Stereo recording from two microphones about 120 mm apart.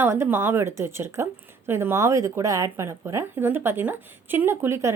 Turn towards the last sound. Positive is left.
turn(degrees=-20)  # may be behind; listen again after turning